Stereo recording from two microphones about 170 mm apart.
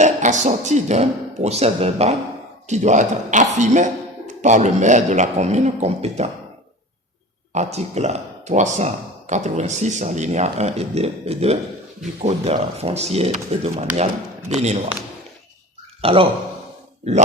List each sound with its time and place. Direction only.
0.0 s speech: 45° right (ahead or behind)
7.5 s speech: 40° right (ahead or behind)
16.0 s a man's voice: 35° right (ahead or behind)